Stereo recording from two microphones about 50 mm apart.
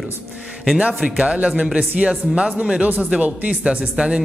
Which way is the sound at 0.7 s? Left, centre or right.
Centre.